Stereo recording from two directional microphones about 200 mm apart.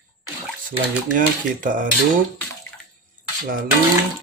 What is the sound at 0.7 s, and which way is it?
Speech, 40° right (ahead or behind).